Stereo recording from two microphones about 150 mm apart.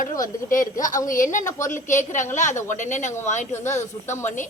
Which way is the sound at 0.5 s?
60° left (ahead or behind).